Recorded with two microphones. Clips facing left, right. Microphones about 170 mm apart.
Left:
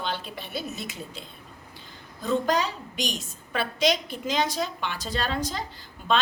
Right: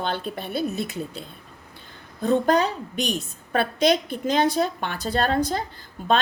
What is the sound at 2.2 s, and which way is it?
A woman's voice, 55° right (ahead or behind).